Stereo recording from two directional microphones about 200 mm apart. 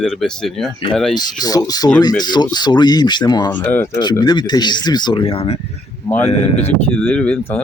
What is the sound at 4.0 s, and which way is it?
Speech, 20° left (ahead or behind).